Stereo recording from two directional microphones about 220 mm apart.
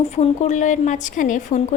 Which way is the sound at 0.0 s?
30° left (ahead or behind).